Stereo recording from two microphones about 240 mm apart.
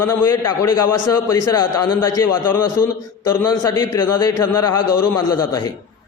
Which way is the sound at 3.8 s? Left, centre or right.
Left.